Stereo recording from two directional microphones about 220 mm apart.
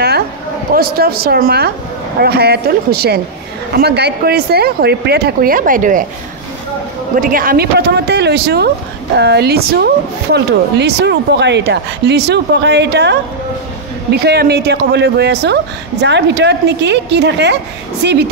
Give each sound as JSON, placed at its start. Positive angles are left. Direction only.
{"t": 0.7, "sound": "a woman's voice", "side_deg": -45}
{"t": 7.2, "sound": "a woman's voice", "side_deg": -40}
{"t": 14.2, "sound": "a woman's voice", "side_deg": -50}